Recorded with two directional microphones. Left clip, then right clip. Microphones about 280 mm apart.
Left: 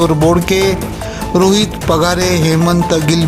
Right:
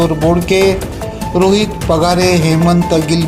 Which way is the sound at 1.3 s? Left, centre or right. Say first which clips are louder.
Even; left.